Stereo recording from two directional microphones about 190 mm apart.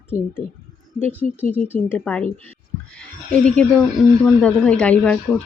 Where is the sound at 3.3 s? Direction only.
5° left (ahead or behind).